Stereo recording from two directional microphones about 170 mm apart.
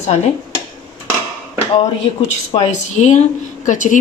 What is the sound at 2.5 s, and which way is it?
Speech, 40° left (ahead or behind).